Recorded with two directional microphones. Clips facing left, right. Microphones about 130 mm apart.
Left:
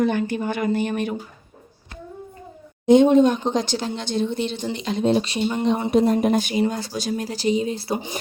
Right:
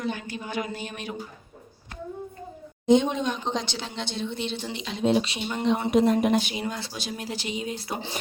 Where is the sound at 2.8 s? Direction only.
55° left (ahead or behind).